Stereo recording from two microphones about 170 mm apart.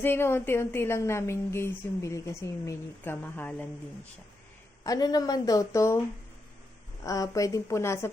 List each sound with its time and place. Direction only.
0.0 s a woman's voice: 15° left (ahead or behind)
4.8 s a woman's voice: 20° left (ahead or behind)
7.0 s a woman's voice: 20° left (ahead or behind)